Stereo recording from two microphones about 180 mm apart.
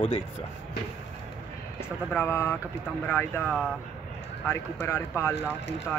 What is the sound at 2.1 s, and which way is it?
Speech, 15° left (ahead or behind).